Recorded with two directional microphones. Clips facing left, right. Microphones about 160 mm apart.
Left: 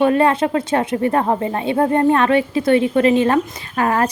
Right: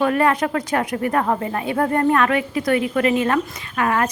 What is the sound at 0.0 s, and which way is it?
Speech, 25° left (ahead or behind).